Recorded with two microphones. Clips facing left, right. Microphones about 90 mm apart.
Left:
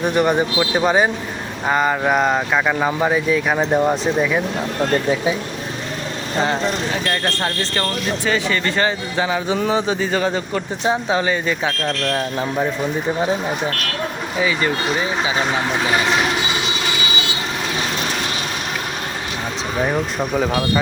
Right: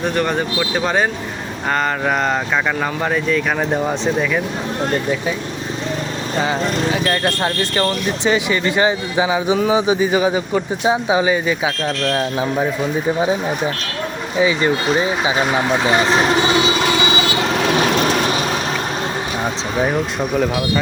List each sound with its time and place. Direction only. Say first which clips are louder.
0.0 s speech: left 2 dB; 15° left (ahead or behind)
6.4 s speech: even; 5° right (ahead or behind)
13.1 s speech: right 2 dB; 15° right (ahead or behind)
15.4 s speech: right 3 dB; 15° right (ahead or behind); by 16.2 s 30° right (ahead or behind)
19.7 s speech: even; centre (ahead or behind)